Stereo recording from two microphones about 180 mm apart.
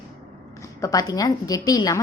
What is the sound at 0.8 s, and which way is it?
A woman's voice, 20° left (ahead or behind).